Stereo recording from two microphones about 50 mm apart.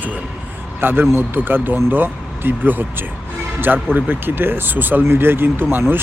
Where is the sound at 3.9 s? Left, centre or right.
Right.